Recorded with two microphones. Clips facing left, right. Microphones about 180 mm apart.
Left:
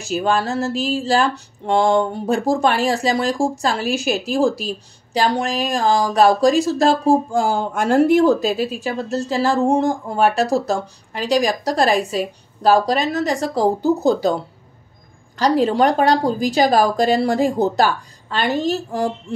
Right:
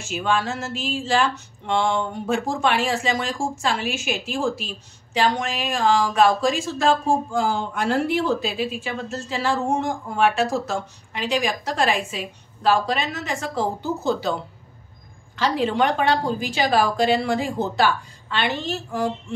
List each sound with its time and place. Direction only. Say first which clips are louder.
0.0 s speech: left 4 dB; 40° left (ahead or behind)